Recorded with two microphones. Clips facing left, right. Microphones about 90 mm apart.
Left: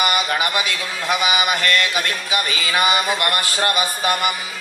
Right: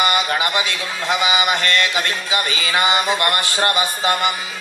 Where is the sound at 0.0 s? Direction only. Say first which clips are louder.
Right 1 dB; 25° right (ahead or behind).